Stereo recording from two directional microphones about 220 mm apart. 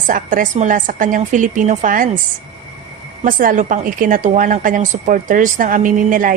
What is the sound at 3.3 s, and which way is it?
A woman's voice, 40° right (ahead or behind).